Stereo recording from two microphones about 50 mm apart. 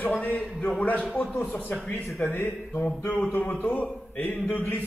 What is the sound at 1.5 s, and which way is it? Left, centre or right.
A man's voice, left.